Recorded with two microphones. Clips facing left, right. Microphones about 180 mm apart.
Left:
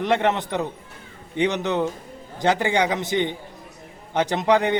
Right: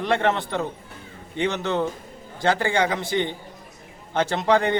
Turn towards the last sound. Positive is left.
turn(degrees=20)  # may be behind; listen again after turning